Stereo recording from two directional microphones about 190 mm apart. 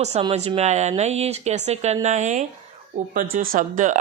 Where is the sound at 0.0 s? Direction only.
30° right (ahead or behind).